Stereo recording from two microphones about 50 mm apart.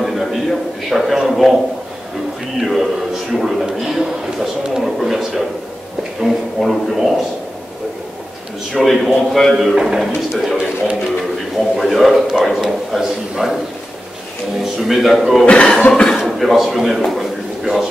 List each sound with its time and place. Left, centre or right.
0.0 s a sound: centre
2.6 s music: centre
3.3 s a sound: centre
8.7 s a man's voice: centre
9.8 s a man's voice: centre
14.6 s a man's voice: centre
15.4 s speech: left
16.0 s a man's voice: centre
17.1 s a sound: centre